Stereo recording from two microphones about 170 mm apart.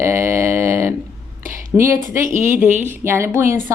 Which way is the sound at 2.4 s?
10° right (ahead or behind).